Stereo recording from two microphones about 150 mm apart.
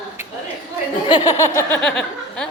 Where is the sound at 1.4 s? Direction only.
20° left (ahead or behind).